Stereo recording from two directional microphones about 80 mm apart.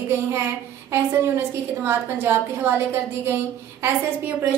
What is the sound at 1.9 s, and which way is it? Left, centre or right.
A woman's voice, right.